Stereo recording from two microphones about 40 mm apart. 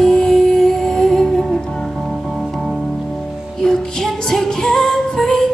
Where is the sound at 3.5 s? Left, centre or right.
Centre.